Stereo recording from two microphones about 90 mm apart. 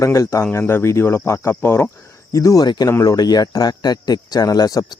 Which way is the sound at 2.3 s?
35° left (ahead or behind).